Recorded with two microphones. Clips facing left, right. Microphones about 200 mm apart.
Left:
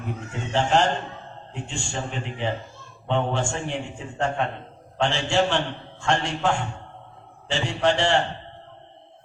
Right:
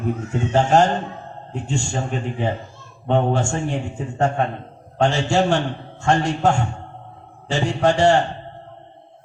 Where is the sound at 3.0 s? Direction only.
45° right (ahead or behind).